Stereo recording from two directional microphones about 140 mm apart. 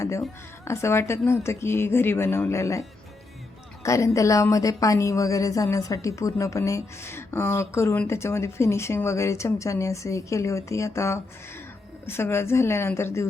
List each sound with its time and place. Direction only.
0.6 s a woman's voice: 20° left (ahead or behind)
3.8 s a woman's voice: 20° left (ahead or behind)